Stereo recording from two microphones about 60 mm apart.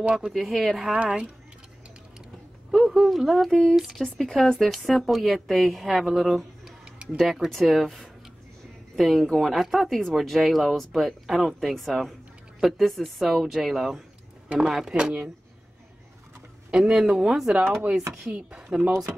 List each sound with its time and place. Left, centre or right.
0.3 s speech: centre
1.0 s speech: centre
2.7 s speech: centre
6.8 s tick-tock: centre
7.2 s speech: centre
16.7 s speech: centre